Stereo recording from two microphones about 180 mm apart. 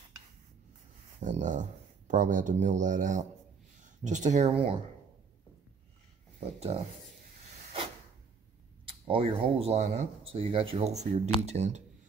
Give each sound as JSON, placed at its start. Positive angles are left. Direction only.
{"t": 1.2, "sound": "speech", "side_deg": -45}
{"t": 6.4, "sound": "speech", "side_deg": -35}
{"t": 8.8, "sound": "speech", "side_deg": -30}